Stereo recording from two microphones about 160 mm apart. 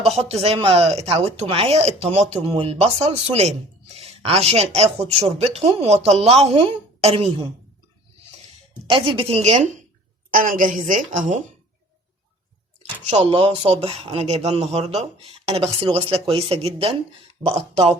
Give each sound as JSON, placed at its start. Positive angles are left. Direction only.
{"t": 0.0, "sound": "speech", "side_deg": -40}
{"t": 8.9, "sound": "speech", "side_deg": -30}
{"t": 10.3, "sound": "a woman's voice", "side_deg": -60}
{"t": 12.8, "sound": "speech", "side_deg": -45}